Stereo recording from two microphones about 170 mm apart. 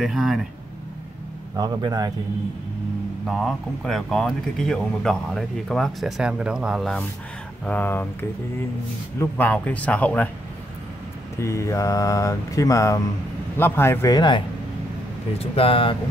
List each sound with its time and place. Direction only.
0.0 s speech: centre (ahead or behind)
1.6 s speech: 25° right (ahead or behind)
3.3 s a man's voice: centre (ahead or behind)
11.3 s a man's voice: 15° left (ahead or behind)